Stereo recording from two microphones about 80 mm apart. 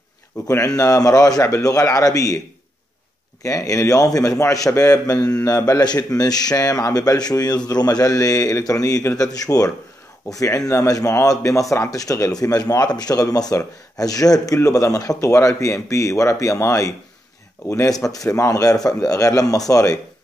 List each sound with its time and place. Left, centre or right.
0.5 s speech: left
3.4 s speech: left